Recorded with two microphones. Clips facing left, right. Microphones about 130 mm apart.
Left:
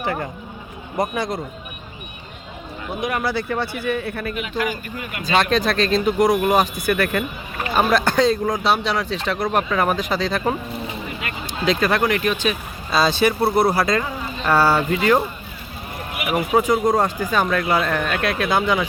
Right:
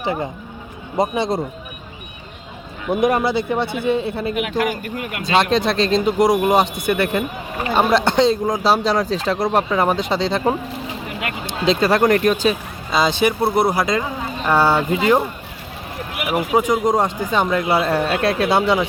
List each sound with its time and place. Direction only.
0.0 s speech: 20° right (ahead or behind)
3.1 s speech: 25° right (ahead or behind)
4.4 s speech: 60° right (ahead or behind)
5.4 s speech: 25° right (ahead or behind)
8.6 s speech: 35° right (ahead or behind)
10.7 s a sound: 75° right (ahead or behind)
11.6 s speech: 30° right (ahead or behind)
12.9 s speech: 15° right (ahead or behind)
16.6 s speech: 15° right (ahead or behind)